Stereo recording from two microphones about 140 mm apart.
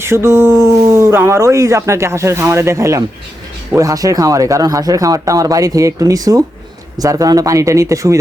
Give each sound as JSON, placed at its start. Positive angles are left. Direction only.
{"t": 0.0, "sound": "speech", "side_deg": -20}